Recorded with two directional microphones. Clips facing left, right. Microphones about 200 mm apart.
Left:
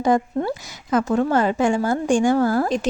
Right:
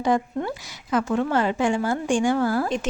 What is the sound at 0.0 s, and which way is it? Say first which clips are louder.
Speech: left 3 dB; 40° left (ahead or behind).